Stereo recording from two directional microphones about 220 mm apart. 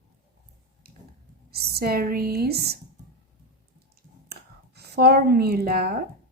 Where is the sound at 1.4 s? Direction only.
45° right (ahead or behind).